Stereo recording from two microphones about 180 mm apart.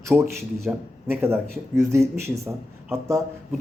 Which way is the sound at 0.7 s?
10° right (ahead or behind).